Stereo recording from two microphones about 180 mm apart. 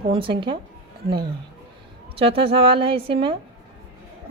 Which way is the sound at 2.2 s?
30° right (ahead or behind).